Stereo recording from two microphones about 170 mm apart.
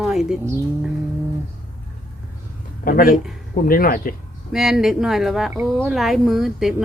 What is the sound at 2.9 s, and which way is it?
Speech, 55° left (ahead or behind).